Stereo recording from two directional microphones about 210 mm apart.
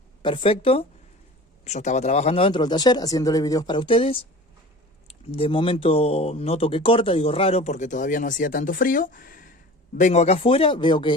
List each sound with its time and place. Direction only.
0.2 s speech: 25° left (ahead or behind)